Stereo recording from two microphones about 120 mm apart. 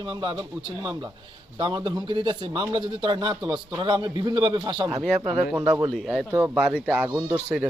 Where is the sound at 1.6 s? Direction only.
40° right (ahead or behind).